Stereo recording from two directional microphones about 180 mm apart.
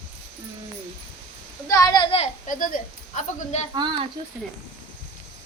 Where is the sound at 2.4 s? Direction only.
50° left (ahead or behind).